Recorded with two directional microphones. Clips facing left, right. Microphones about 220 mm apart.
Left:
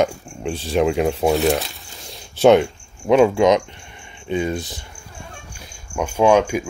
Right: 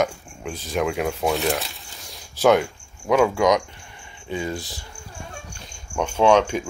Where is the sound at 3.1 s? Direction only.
25° left (ahead or behind).